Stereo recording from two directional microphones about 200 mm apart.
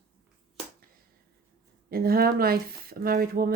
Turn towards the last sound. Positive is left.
turn(degrees=-50)  # may be behind; listen again after turning